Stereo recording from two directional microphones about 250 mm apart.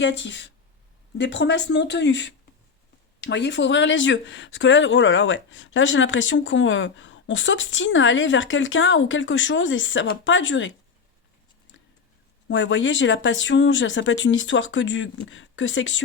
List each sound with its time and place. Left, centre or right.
0.0 s speech: left
12.5 s speech: left